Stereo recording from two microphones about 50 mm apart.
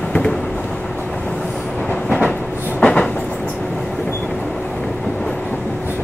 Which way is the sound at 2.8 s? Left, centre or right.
Left.